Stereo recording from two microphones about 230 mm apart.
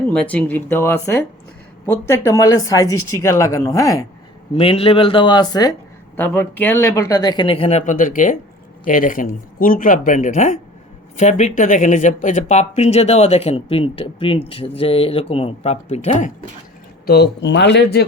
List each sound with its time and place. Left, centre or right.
0.1 s speech: centre
4.5 s speech: left
17.1 s speech: left